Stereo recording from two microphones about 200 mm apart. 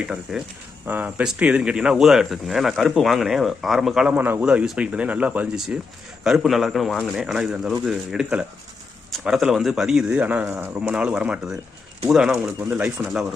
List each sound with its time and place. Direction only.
0.0 s speech: 5° right (ahead or behind)